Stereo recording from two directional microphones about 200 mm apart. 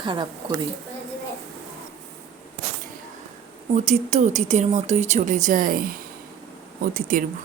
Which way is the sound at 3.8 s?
35° right (ahead or behind).